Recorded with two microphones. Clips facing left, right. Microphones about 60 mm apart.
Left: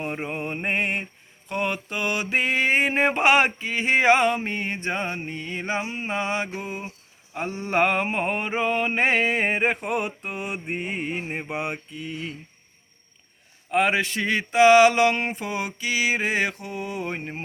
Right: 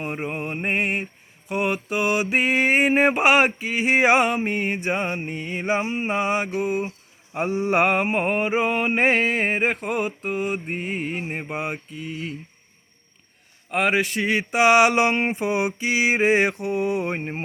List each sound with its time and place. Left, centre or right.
0.0 s mantra: centre
13.7 s mantra: centre
14.3 s a sound: centre